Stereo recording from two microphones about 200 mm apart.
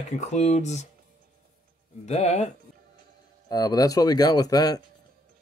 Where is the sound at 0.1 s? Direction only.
35° left (ahead or behind).